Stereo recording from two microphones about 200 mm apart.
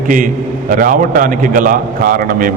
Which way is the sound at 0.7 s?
45° right (ahead or behind).